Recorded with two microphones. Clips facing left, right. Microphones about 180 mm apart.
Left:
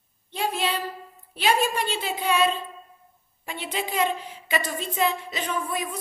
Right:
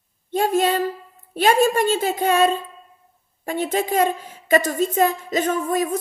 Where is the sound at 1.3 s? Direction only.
45° right (ahead or behind).